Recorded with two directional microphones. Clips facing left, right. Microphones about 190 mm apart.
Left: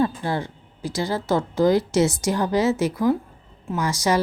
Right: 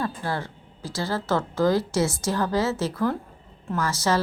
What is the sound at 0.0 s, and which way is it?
A woman's voice, 20° left (ahead or behind).